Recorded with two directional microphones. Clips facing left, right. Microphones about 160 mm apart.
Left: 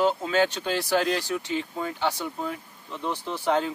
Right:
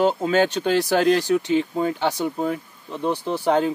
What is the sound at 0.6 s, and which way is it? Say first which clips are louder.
Speech: right 6 dB; 60° right (ahead or behind).